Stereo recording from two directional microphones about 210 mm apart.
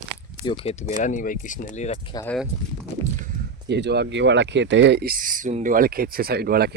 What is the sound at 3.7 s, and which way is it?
Speech, 55° right (ahead or behind).